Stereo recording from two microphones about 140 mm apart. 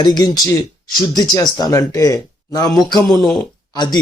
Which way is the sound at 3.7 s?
30° left (ahead or behind).